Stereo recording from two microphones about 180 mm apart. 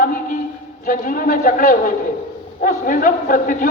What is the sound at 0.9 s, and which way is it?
A man's voice, 50° left (ahead or behind).